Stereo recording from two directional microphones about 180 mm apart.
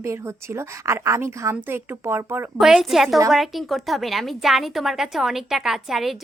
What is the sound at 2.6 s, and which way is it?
A woman's voice, centre (ahead or behind).